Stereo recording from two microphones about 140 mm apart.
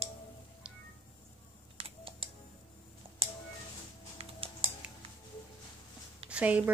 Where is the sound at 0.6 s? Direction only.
5° right (ahead or behind).